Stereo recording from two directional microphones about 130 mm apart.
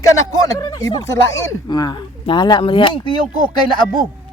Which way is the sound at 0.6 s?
30° left (ahead or behind).